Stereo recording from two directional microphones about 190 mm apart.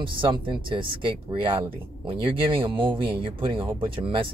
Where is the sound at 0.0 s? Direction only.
25° right (ahead or behind).